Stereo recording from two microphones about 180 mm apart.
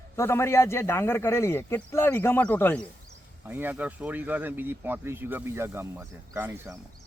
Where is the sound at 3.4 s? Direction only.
10° right (ahead or behind).